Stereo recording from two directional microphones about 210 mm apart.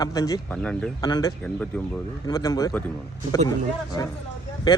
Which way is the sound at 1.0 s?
20° left (ahead or behind).